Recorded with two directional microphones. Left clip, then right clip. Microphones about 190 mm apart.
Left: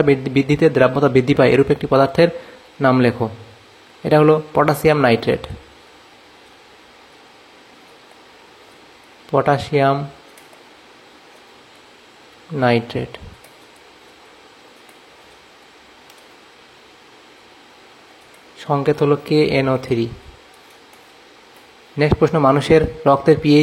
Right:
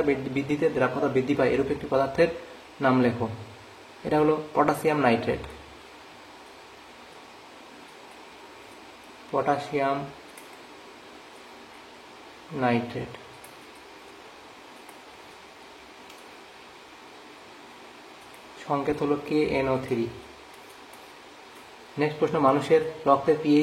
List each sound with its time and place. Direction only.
0.0 s speech: 40° left (ahead or behind)
4.1 s speech: 40° left (ahead or behind)
9.3 s speech: 40° left (ahead or behind)
12.5 s speech: 40° left (ahead or behind)
18.7 s speech: 40° left (ahead or behind)
21.9 s speech: 40° left (ahead or behind)